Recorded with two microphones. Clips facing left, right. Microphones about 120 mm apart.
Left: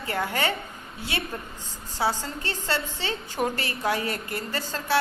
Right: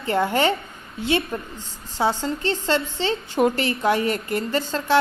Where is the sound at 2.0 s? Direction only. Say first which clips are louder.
Right 5 dB; 25° right (ahead or behind).